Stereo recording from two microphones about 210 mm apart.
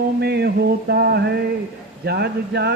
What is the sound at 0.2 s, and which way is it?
Speech, 50° right (ahead or behind).